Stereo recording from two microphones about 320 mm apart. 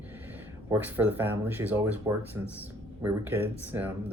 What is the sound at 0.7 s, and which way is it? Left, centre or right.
Speech, centre.